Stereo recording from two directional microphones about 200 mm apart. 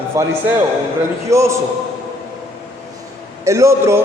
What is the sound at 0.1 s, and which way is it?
A man's voice, 15° right (ahead or behind).